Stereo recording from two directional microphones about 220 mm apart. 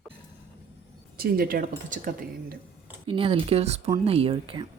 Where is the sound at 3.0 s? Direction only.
25° right (ahead or behind).